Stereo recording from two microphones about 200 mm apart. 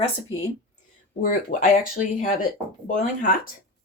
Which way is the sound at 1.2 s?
40° left (ahead or behind).